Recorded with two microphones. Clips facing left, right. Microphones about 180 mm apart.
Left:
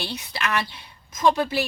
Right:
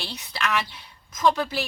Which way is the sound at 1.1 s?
25° left (ahead or behind).